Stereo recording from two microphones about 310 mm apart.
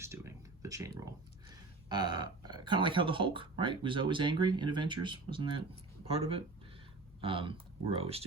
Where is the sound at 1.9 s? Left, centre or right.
Centre.